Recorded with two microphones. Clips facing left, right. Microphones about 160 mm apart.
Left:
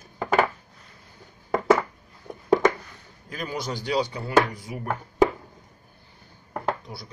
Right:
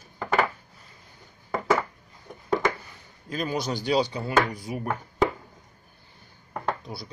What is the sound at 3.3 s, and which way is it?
Speech, 20° right (ahead or behind).